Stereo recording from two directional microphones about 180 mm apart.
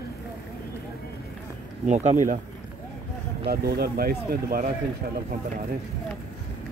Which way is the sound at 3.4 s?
60° right (ahead or behind).